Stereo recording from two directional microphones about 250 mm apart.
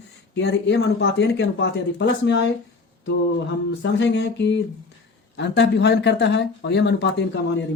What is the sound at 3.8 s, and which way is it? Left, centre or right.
Speech, left.